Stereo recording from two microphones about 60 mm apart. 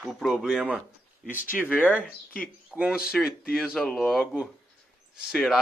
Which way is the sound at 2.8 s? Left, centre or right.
Centre.